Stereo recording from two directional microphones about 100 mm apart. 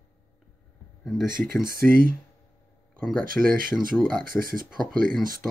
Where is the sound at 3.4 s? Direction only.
5° left (ahead or behind).